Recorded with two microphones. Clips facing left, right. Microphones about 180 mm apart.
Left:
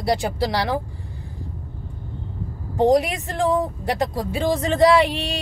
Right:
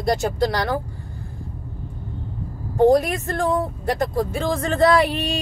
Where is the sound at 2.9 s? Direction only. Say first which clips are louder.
Right 1 dB; 15° left (ahead or behind).